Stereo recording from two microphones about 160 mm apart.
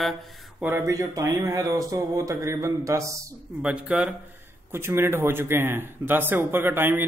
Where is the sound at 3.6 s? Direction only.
5° right (ahead or behind).